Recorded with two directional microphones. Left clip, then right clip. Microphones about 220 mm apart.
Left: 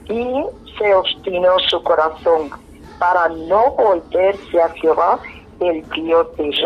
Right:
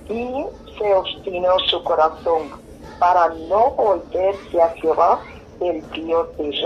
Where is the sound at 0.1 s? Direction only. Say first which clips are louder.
Left 5 dB; 20° left (ahead or behind).